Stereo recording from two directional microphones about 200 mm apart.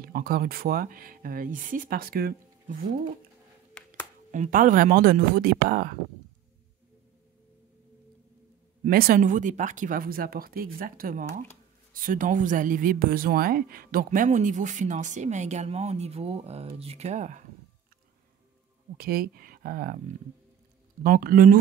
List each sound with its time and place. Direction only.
0.0 s speech: 45° right (ahead or behind)
3.7 s music: 10° left (ahead or behind)
4.3 s speech: 40° right (ahead or behind)
8.8 s speech: 45° right (ahead or behind)
18.9 s speech: 50° right (ahead or behind)
21.0 s speech: 45° right (ahead or behind)